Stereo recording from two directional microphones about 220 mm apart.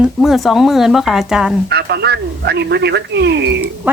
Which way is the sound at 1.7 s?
50° right (ahead or behind).